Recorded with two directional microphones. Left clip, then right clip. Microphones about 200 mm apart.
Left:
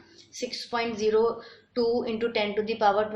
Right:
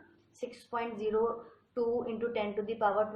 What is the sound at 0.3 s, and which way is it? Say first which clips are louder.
A woman's voice: left 7 dB; 30° left (ahead or behind).